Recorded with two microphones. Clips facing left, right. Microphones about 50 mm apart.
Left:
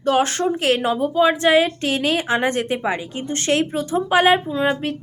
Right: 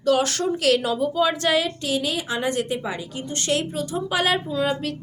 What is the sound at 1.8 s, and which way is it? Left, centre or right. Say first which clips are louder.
A woman's voice: left 5 dB; left.